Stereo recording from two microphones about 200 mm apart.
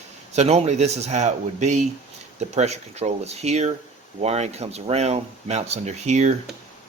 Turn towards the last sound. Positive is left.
turn(degrees=-35)  # may be behind; listen again after turning